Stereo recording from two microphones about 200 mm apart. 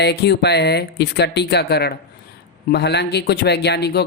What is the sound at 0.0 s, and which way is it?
Speech, 55° left (ahead or behind).